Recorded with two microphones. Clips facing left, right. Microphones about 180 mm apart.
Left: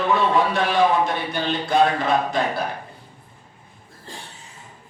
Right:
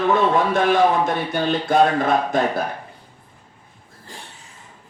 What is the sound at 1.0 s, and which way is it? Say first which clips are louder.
Speech: right 2 dB; 50° right (ahead or behind).